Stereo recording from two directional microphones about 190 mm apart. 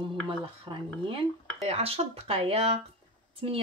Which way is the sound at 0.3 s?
25° right (ahead or behind).